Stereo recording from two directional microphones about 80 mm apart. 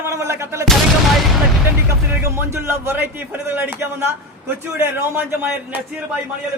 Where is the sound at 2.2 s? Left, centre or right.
Right.